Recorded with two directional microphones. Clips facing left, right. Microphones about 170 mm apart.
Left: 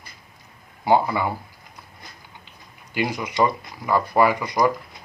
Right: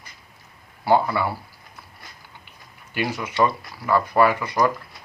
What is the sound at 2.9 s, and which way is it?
Speech, 15° left (ahead or behind).